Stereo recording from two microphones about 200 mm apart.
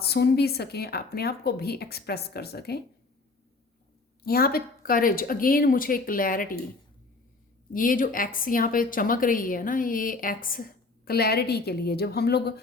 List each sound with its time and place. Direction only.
0.0 s a woman's voice: 55° left (ahead or behind)
4.2 s a woman's voice: 50° left (ahead or behind)
7.7 s a woman's voice: 45° left (ahead or behind)